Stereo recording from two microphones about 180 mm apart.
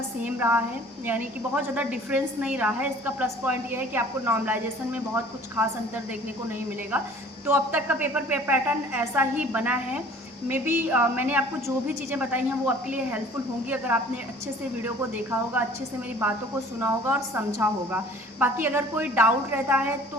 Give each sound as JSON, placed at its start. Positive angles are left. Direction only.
{"t": 0.2, "sound": "a woman's voice", "side_deg": -10}
{"t": 7.4, "sound": "a woman's voice", "side_deg": -10}
{"t": 16.8, "sound": "a woman's voice", "side_deg": -10}